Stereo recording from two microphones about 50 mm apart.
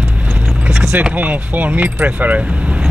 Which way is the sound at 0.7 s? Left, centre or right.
Centre.